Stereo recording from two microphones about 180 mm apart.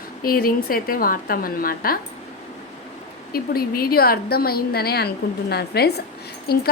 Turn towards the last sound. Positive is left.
turn(degrees=60)  # may be behind; listen again after turning